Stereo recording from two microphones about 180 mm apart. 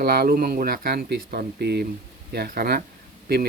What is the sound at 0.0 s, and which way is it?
Speech, 60° right (ahead or behind).